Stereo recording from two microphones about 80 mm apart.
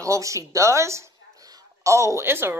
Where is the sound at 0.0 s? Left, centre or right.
Right.